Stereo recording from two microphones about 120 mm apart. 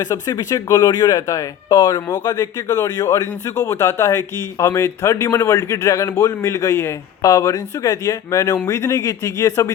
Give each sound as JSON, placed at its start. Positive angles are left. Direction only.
{"t": 0.0, "sound": "speech", "side_deg": 30}